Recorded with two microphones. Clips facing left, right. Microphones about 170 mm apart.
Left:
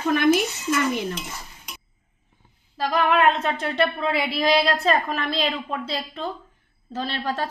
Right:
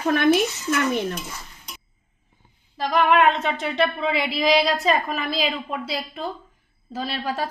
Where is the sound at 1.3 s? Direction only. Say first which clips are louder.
Left 1 dB; 10° left (ahead or behind).